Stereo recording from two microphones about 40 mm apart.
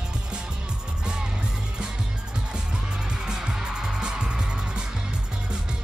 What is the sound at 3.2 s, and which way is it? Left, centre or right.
Music, centre.